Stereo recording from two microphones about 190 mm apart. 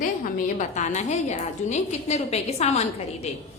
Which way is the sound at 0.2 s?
40° left (ahead or behind).